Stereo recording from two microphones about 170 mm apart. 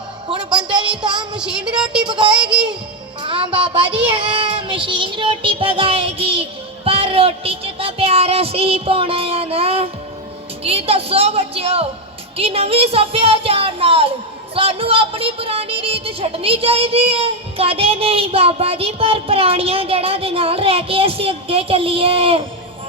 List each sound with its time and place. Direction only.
0.3 s a woman's voice: 30° right (ahead or behind)
1.4 s child singing: 5° right (ahead or behind)
2.0 s child singing: 30° right (ahead or behind)
2.4 s child singing: 5° right (ahead or behind)
3.2 s speech: 30° right (ahead or behind)